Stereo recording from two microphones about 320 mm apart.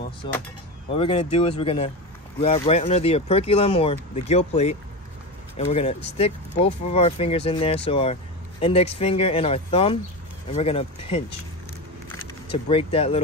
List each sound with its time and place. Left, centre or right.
0.8 s speech: centre
12.4 s speech: centre